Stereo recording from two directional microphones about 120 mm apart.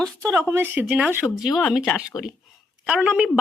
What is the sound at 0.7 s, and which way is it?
Speech, 10° right (ahead or behind).